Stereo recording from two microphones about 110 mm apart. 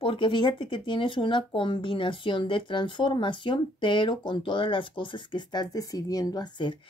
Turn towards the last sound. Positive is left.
turn(degrees=40)  # may be behind; listen again after turning